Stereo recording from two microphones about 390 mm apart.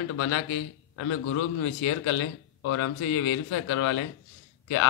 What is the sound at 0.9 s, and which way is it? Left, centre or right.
A man's voice, left.